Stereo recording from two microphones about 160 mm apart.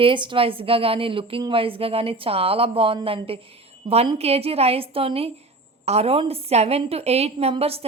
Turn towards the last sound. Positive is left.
turn(degrees=-35)  # may be behind; listen again after turning